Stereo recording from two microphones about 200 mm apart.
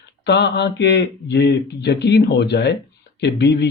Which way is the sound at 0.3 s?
60° left (ahead or behind).